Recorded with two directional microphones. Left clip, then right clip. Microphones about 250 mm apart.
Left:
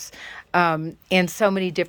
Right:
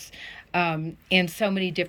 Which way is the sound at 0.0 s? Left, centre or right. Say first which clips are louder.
Left 3 dB; centre.